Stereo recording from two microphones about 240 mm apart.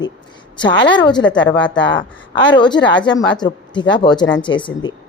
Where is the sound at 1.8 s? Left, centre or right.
Centre.